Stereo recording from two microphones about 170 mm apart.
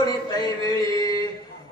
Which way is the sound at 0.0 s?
25° left (ahead or behind).